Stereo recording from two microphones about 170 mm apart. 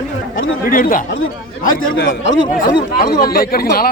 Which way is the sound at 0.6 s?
55° left (ahead or behind).